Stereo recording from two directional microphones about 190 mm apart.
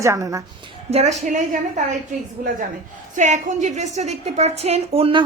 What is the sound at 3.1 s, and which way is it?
A woman's voice, 40° right (ahead or behind).